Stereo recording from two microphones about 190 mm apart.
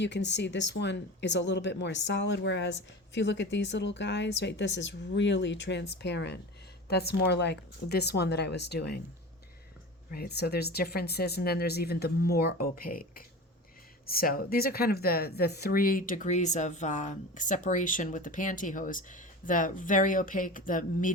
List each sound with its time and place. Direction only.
0.0 s speech: 65° left (ahead or behind)
10.1 s speech: 55° left (ahead or behind)